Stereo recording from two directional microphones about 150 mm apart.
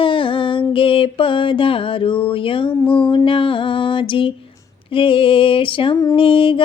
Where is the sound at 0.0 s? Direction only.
35° left (ahead or behind).